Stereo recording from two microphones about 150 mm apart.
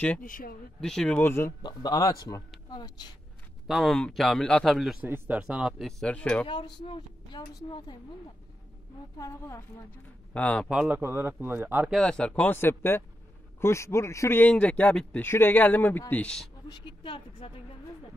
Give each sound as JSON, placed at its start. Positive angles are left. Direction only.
{"t": 0.2, "sound": "speech", "side_deg": 70}
{"t": 0.7, "sound": "a man's voice", "side_deg": 5}
{"t": 1.6, "sound": "a man's voice", "side_deg": 30}
{"t": 3.6, "sound": "speech", "side_deg": 0}
{"t": 5.0, "sound": "speech", "side_deg": -15}
{"t": 6.4, "sound": "speech", "side_deg": 35}
{"t": 9.2, "sound": "a man's voice", "side_deg": 20}
{"t": 10.3, "sound": "a man's voice", "side_deg": 10}
{"t": 10.7, "sound": "speech", "side_deg": -10}
{"t": 11.9, "sound": "a man's voice", "side_deg": 5}
{"t": 16.6, "sound": "a woman's voice", "side_deg": 30}